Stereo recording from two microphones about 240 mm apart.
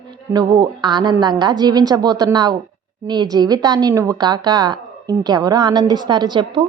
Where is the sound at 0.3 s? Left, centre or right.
Centre.